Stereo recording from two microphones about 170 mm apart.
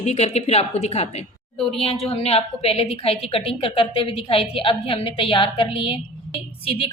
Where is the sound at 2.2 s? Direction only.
35° left (ahead or behind).